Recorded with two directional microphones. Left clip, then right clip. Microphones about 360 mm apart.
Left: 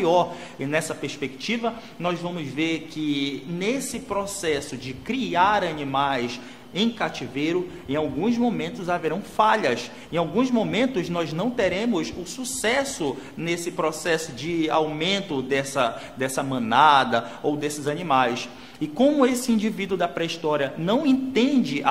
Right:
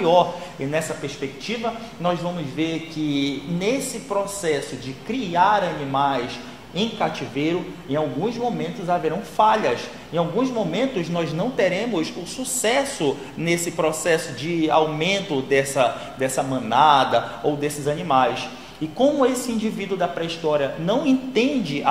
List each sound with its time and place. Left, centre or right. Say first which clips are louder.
0.0 s a man's voice: right 3 dB; left
12.6 s a man's voice: right 3 dB; left